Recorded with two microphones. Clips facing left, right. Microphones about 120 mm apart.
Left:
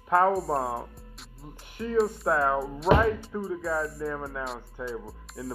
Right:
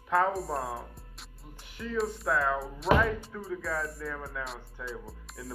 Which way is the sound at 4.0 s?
30° left (ahead or behind).